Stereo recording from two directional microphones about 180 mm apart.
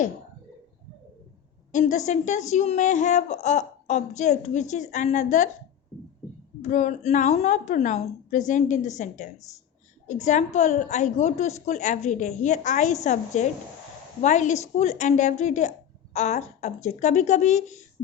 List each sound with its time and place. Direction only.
1.7 s a woman's voice: 40° left (ahead or behind)
6.6 s a woman's voice: 45° left (ahead or behind)